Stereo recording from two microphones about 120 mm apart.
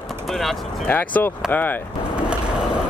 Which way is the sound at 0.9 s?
15° left (ahead or behind).